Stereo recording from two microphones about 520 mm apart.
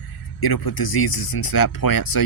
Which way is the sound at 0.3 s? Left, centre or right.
Left.